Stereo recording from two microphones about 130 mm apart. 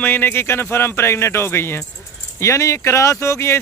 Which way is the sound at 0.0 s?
15° left (ahead or behind).